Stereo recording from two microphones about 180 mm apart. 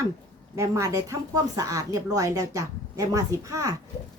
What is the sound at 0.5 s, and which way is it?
Speech, 15° right (ahead or behind).